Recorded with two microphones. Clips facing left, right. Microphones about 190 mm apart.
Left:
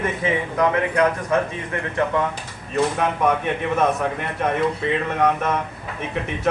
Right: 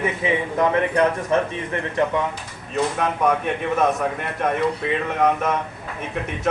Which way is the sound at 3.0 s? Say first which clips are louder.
Even; centre (ahead or behind).